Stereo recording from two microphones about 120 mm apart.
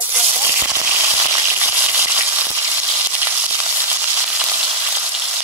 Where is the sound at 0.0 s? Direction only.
15° right (ahead or behind).